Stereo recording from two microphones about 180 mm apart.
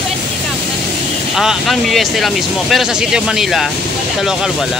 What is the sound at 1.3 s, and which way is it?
Speech, centre (ahead or behind).